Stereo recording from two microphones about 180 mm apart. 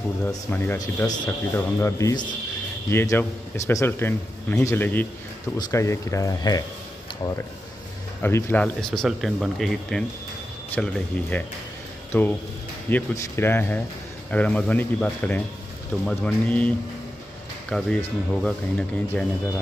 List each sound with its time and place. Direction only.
0.3 s speech: 10° left (ahead or behind)
8.2 s speech: 15° left (ahead or behind)